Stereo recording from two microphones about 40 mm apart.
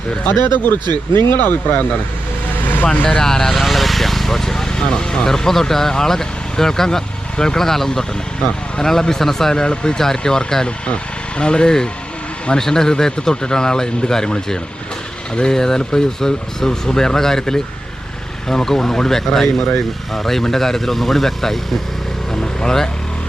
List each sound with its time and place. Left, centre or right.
0.3 s speech: left
2.9 s speech: left
3.2 s speech: centre
3.6 s speech: centre
10.8 s speech: left; by 21.6 s centre
22.4 s vehicle: centre